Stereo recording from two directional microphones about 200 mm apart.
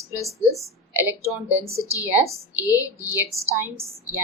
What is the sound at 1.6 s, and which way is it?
Speech, 30° right (ahead or behind).